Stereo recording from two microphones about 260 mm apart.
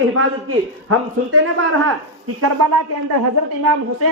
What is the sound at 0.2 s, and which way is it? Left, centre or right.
A man's voice, right.